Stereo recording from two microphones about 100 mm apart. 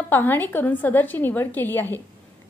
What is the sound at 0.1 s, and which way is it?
A woman's voice, 20° left (ahead or behind).